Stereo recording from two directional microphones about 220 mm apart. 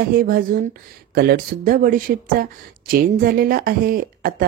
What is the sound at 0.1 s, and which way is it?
Speech, 40° right (ahead or behind).